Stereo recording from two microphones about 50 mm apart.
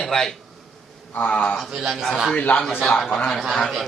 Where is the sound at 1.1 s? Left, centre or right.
Left.